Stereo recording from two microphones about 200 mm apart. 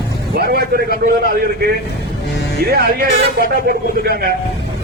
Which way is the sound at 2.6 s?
50° right (ahead or behind).